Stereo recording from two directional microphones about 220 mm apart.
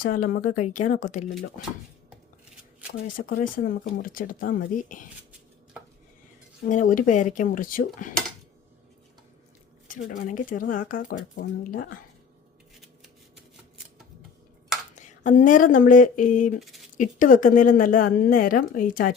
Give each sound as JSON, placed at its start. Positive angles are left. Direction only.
{"t": 0.0, "sound": "a woman's voice", "side_deg": 40}
{"t": 3.0, "sound": "a woman's voice", "side_deg": 40}
{"t": 6.7, "sound": "a woman's voice", "side_deg": 35}
{"t": 9.9, "sound": "a woman's voice", "side_deg": 35}
{"t": 12.8, "sound": "shuffling cards", "side_deg": 0}
{"t": 14.9, "sound": "speech", "side_deg": 35}
{"t": 16.6, "sound": "speech", "side_deg": 0}
{"t": 17.0, "sound": "a woman's voice", "side_deg": 35}